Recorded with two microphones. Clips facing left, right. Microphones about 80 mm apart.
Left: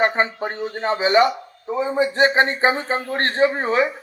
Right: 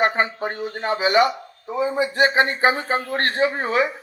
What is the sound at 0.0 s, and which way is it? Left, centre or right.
A man's voice, left.